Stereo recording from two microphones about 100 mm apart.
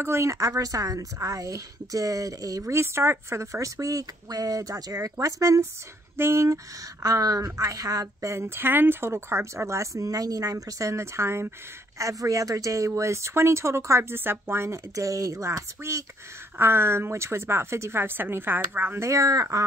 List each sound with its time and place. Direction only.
0.0 s a woman's voice: 30° right (ahead or behind)